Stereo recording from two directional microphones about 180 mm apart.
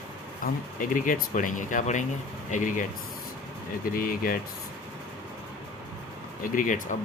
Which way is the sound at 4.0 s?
55° left (ahead or behind).